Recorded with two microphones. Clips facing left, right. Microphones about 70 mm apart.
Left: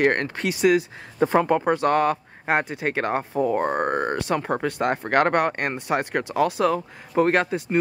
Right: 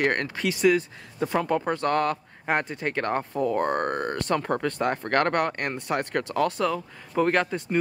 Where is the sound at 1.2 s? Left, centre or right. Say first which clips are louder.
Left 5 dB; left.